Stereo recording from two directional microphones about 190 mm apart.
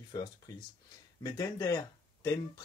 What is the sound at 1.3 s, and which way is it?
Speech, 20° left (ahead or behind).